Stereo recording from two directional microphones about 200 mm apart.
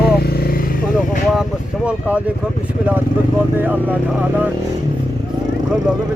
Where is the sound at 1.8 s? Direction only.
5° right (ahead or behind).